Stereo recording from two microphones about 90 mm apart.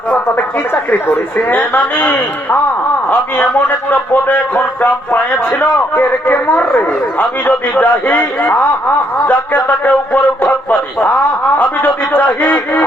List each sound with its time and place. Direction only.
0.1 s speech: 20° left (ahead or behind)